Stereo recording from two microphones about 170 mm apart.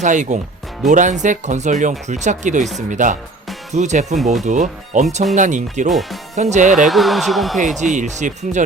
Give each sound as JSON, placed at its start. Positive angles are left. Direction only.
{"t": 0.0, "sound": "speech", "side_deg": -45}
{"t": 5.9, "sound": "speech", "side_deg": 0}
{"t": 6.3, "sound": "speech", "side_deg": -45}
{"t": 6.8, "sound": "speech", "side_deg": 0}
{"t": 7.8, "sound": "speech", "side_deg": -45}